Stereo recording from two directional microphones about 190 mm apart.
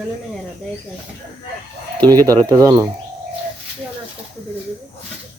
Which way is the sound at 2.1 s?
20° right (ahead or behind).